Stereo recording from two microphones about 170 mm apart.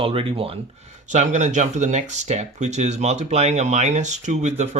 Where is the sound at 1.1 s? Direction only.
45° right (ahead or behind).